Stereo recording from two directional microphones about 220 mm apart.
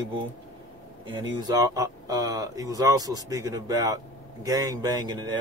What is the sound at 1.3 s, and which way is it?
Speech, 20° right (ahead or behind).